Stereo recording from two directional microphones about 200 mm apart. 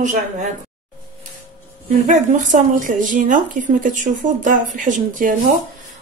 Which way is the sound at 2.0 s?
40° right (ahead or behind).